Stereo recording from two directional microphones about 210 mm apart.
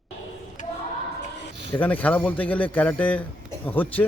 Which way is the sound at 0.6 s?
35° left (ahead or behind).